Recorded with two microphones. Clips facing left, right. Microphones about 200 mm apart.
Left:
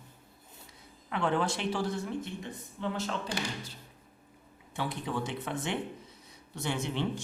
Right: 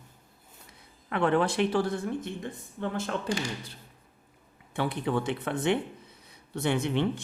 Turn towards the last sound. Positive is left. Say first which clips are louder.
# right 5 dB
turn(degrees=-60)  # may be behind; listen again after turning